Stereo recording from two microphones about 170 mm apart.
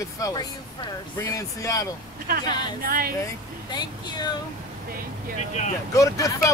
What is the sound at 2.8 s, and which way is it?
Speech, 60° right (ahead or behind).